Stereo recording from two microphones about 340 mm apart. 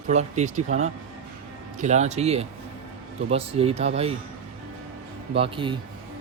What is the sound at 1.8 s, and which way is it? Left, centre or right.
Speech, centre.